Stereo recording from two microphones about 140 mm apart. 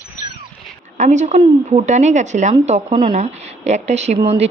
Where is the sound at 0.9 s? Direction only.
60° right (ahead or behind).